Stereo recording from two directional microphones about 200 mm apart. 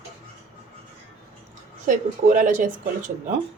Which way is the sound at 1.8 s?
40° right (ahead or behind).